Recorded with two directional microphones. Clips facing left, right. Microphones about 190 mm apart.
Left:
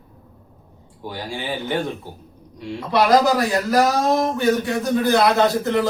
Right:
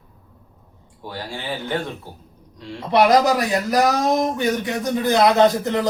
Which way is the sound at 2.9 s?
20° right (ahead or behind).